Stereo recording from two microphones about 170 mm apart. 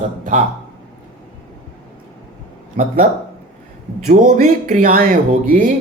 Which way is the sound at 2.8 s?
60° right (ahead or behind).